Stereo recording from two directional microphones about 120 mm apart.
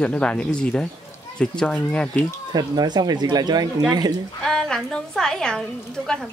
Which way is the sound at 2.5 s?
35° right (ahead or behind).